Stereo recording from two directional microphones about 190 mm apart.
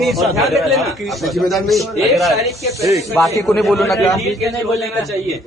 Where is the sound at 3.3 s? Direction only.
15° left (ahead or behind).